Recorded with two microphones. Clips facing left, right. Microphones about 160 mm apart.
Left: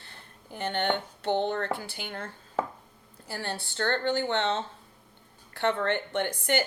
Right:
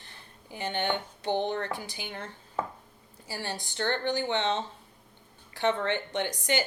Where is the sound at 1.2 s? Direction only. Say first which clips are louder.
Left 1 dB; 15° right (ahead or behind).